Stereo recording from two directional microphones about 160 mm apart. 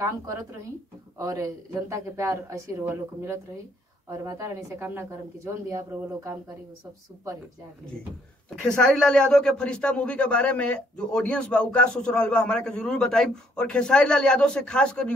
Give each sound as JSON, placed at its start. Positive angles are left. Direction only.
{"t": 0.0, "sound": "speech", "side_deg": -20}
{"t": 8.6, "sound": "a man's voice", "side_deg": 5}